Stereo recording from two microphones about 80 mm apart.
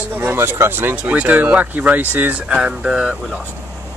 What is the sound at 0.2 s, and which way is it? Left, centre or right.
Speech, right.